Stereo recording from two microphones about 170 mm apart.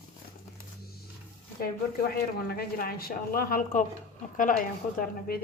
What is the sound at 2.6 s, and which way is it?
A woman's voice, 60° left (ahead or behind).